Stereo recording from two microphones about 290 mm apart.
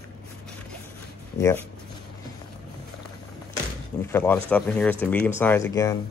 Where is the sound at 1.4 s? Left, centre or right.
Centre.